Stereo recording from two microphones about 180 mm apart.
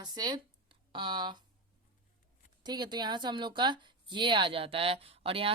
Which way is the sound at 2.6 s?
25° right (ahead or behind).